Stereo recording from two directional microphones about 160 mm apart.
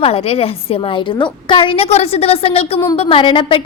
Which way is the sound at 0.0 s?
35° left (ahead or behind).